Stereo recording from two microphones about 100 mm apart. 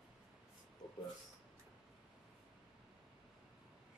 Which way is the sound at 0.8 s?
45° left (ahead or behind).